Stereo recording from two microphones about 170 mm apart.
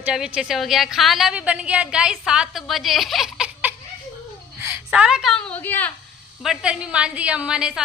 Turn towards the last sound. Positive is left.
turn(degrees=-5)  # may be behind; listen again after turning